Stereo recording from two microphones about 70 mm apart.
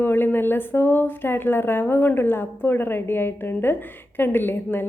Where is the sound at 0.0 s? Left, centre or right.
Left.